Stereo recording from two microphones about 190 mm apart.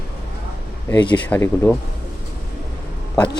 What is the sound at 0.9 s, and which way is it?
Speech, 25° left (ahead or behind).